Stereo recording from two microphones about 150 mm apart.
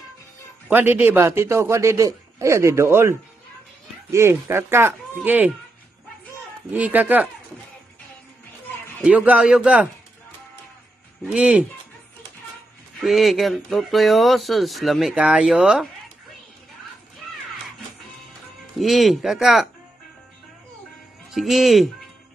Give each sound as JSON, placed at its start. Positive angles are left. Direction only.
{"t": 0.7, "sound": "a man's voice", "side_deg": -15}
{"t": 6.7, "sound": "a man's voice", "side_deg": -10}
{"t": 9.0, "sound": "a man's voice", "side_deg": -10}
{"t": 11.2, "sound": "a man's voice", "side_deg": -10}
{"t": 13.0, "sound": "speech", "side_deg": 0}
{"t": 18.8, "sound": "speech", "side_deg": 0}
{"t": 21.3, "sound": "speech", "side_deg": 0}